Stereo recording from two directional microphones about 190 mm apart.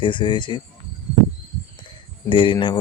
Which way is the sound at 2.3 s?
25° left (ahead or behind).